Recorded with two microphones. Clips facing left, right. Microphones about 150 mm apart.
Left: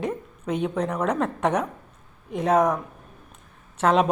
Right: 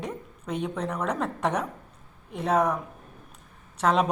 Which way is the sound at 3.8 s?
5° left (ahead or behind).